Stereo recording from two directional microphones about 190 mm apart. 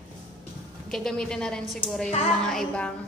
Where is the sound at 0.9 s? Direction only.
5° left (ahead or behind).